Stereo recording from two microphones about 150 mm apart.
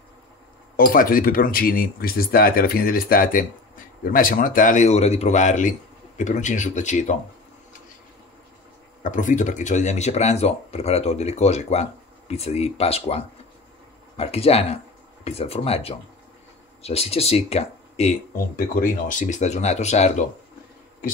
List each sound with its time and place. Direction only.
0.7 s speech: 70° left (ahead or behind)
9.0 s speech: 55° left (ahead or behind)
18.3 s speech: 65° left (ahead or behind); by 20.2 s 50° left (ahead or behind)